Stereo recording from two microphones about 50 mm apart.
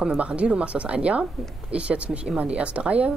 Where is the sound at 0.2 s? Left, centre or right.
Right.